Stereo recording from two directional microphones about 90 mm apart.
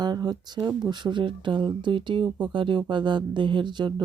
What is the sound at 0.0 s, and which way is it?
Speech, 50° right (ahead or behind).